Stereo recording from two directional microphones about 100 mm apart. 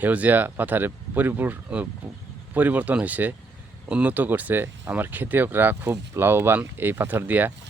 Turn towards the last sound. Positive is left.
turn(degrees=-20)  # may be behind; listen again after turning